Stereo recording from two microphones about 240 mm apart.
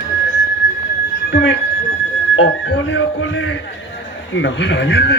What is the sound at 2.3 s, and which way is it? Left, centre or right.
Music, left.